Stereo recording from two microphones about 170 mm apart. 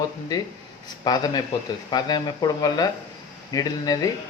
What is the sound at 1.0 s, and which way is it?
Speech, 25° left (ahead or behind).